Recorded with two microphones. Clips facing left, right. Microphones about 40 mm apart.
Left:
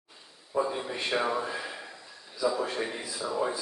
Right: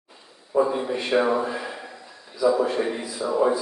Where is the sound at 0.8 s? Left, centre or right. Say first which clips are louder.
Right 7 dB; right.